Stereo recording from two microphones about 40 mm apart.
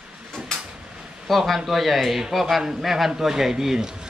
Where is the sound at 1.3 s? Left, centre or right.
Centre.